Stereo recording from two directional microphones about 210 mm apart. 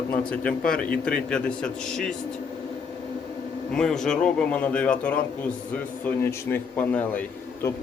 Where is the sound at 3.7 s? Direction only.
5° left (ahead or behind).